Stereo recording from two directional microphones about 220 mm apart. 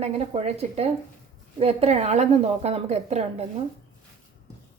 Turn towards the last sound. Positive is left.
turn(degrees=-30)  # may be behind; listen again after turning